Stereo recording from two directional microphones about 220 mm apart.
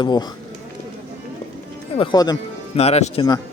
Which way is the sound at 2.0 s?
20° left (ahead or behind).